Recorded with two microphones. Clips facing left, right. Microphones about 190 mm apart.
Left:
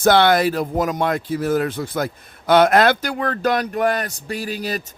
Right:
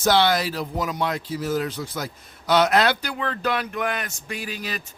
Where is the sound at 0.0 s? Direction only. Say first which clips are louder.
Left 5 dB; 55° left (ahead or behind).